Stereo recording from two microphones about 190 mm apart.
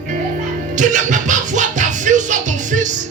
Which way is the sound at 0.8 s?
40° right (ahead or behind).